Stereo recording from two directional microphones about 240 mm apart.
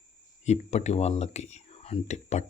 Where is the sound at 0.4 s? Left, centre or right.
Left.